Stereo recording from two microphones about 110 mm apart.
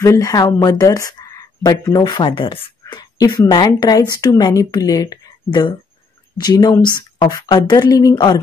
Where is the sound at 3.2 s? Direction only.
35° left (ahead or behind).